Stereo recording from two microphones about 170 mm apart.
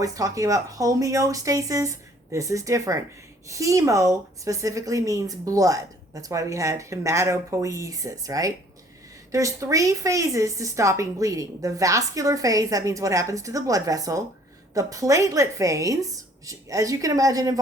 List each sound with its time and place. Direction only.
0.0 s speech: 20° right (ahead or behind)